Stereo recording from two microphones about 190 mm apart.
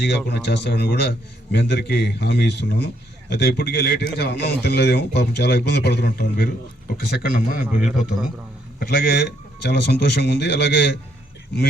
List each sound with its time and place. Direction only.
0.0 s a man's voice: 65° left (ahead or behind)
7.6 s a man's voice: 5° right (ahead or behind)
8.8 s a man's voice: 55° left (ahead or behind)